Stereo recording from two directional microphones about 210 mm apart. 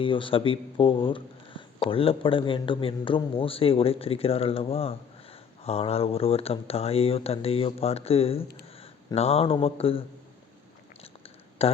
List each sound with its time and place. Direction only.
0.0 s speech: 25° left (ahead or behind)
11.6 s speech: 30° left (ahead or behind)